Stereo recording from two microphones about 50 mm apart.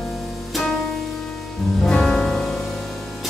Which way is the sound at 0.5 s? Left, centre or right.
Centre.